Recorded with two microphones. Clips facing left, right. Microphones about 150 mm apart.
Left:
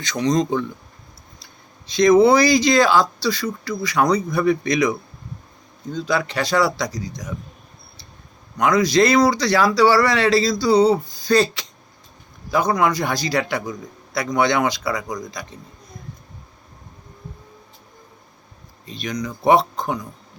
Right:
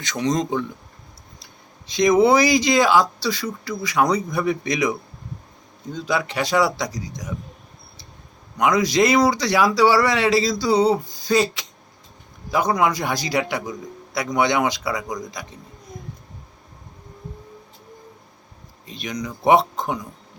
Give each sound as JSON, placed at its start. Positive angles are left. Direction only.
{"t": 0.0, "sound": "speech", "side_deg": -5}
{"t": 1.9, "sound": "speech", "side_deg": -15}
{"t": 8.5, "sound": "speech", "side_deg": -15}
{"t": 18.9, "sound": "speech", "side_deg": -15}